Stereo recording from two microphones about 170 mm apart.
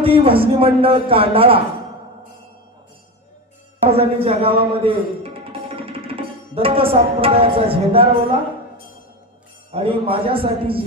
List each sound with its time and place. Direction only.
0.0 s a man's voice: 35° right (ahead or behind)
3.9 s a man's voice: 35° right (ahead or behind)
9.7 s a man's voice: 35° right (ahead or behind)